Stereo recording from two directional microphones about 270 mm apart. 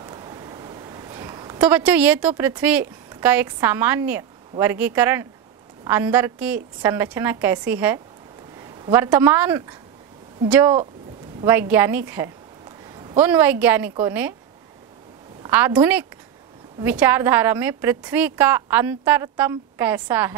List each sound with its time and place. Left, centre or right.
0.0 s a sound: centre
1.7 s a woman's voice: centre
15.4 s a woman's voice: centre